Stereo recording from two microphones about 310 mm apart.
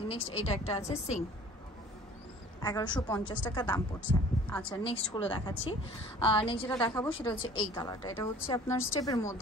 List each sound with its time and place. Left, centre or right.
0.1 s speech: centre
2.6 s a woman's voice: centre
4.6 s a woman's voice: centre